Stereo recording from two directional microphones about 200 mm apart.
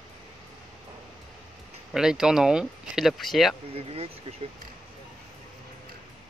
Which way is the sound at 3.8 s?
30° right (ahead or behind).